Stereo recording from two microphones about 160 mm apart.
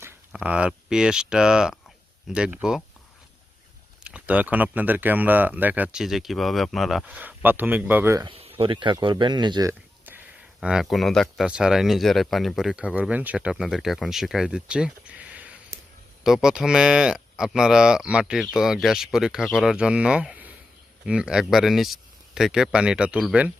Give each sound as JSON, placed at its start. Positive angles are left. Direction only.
{"t": 0.0, "sound": "speech", "side_deg": -10}
{"t": 4.0, "sound": "speech", "side_deg": -10}
{"t": 8.2, "sound": "speech", "side_deg": -35}
{"t": 10.6, "sound": "speech", "side_deg": -5}